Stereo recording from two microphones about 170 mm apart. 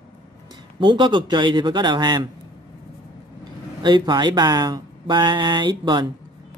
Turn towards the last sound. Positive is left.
turn(degrees=-25)  # may be behind; listen again after turning